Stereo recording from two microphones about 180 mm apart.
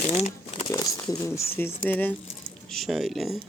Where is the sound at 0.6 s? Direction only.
20° left (ahead or behind).